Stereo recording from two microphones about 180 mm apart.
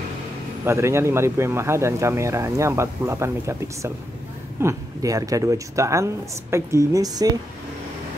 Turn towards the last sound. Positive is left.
turn(degrees=-20)  # may be behind; listen again after turning